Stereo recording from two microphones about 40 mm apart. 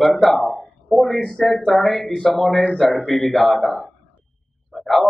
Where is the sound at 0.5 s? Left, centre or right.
Centre.